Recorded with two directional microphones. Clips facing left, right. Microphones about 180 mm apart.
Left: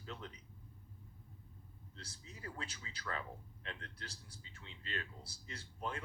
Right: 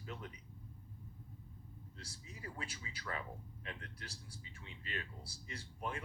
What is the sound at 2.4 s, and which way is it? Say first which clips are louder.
Speech: even; 15° right (ahead or behind).